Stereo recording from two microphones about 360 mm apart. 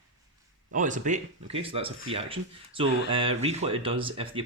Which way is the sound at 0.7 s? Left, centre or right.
Right.